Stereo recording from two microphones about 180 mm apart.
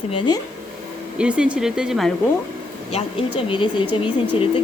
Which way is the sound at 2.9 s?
30° left (ahead or behind).